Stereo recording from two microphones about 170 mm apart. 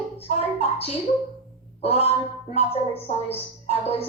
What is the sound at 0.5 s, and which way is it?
A woman's voice, 35° left (ahead or behind).